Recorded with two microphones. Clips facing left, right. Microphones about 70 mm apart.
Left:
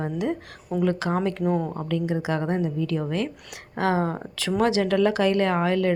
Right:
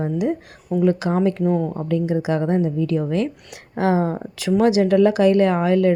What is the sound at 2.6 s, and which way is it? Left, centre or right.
Speech, right.